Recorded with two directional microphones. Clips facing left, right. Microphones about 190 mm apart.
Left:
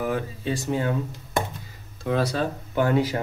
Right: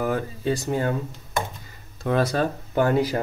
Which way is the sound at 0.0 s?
45° right (ahead or behind).